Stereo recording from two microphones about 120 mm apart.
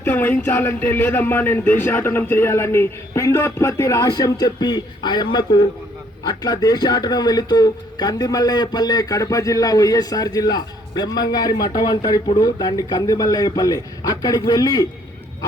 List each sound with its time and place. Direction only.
0.0 s speech: 15° left (ahead or behind); by 14.8 s 35° left (ahead or behind)